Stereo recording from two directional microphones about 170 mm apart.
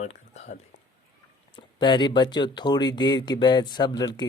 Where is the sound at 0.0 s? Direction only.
40° left (ahead or behind).